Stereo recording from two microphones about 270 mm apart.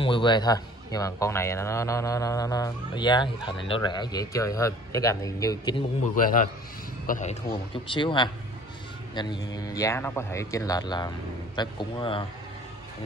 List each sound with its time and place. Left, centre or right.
0.0 s a man's voice: centre
6.1 s a man's voice: left